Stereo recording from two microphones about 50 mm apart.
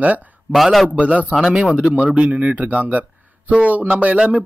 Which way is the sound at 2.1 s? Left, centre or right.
Right.